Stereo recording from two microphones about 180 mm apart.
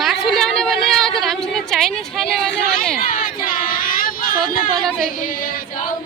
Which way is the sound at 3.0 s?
50° left (ahead or behind).